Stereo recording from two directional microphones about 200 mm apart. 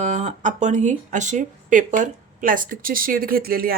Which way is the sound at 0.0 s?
35° right (ahead or behind).